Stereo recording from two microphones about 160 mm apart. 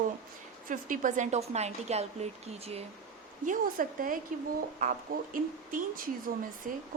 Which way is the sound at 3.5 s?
60° right (ahead or behind).